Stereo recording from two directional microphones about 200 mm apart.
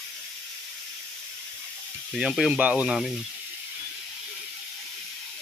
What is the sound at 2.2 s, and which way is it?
Speech, 5° right (ahead or behind).